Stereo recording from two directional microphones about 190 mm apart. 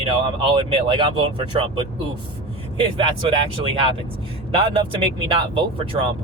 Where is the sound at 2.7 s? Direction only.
25° right (ahead or behind).